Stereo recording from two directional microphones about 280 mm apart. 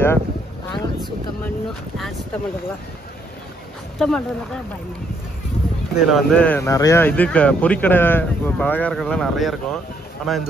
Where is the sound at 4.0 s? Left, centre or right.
Centre.